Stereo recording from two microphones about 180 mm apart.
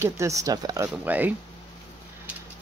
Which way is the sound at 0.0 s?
15° right (ahead or behind).